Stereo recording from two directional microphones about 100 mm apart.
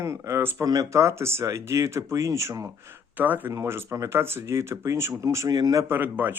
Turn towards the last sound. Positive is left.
turn(degrees=-20)  # may be behind; listen again after turning